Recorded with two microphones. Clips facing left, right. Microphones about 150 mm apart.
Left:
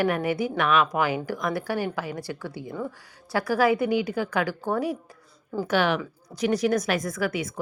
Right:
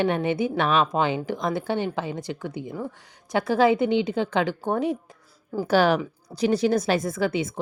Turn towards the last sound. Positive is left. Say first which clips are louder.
# right 3 dB
turn(degrees=-25)  # may be behind; listen again after turning